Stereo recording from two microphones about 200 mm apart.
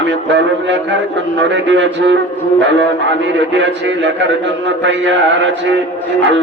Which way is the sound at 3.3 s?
65° right (ahead or behind).